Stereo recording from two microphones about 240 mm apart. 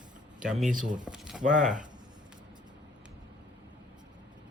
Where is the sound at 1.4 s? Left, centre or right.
Right.